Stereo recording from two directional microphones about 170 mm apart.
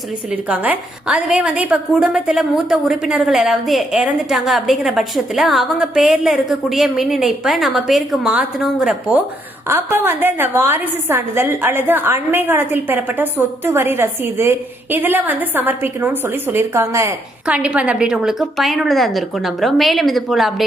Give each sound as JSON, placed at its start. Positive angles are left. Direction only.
{"t": 0.3, "sound": "a woman's voice", "side_deg": -5}